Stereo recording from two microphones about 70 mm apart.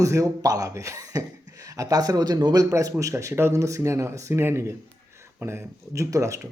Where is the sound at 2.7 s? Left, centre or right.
Right.